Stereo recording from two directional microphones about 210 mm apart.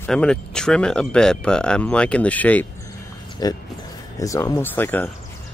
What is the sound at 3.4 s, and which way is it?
Speech, 20° left (ahead or behind).